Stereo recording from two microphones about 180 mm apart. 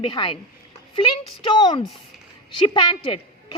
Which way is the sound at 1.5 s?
25° left (ahead or behind).